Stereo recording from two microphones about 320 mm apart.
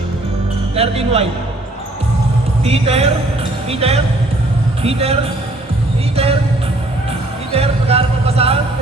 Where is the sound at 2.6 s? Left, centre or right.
Centre.